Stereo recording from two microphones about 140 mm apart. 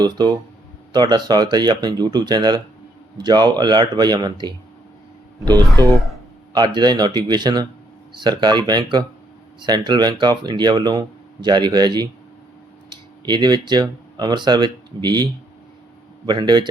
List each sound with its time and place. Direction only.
0.0 s speech: 30° right (ahead or behind)
5.8 s speech: 30° right (ahead or behind)